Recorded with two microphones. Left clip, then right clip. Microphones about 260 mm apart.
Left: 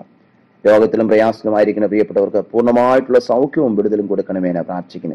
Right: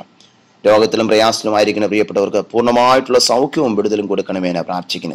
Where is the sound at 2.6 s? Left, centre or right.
Right.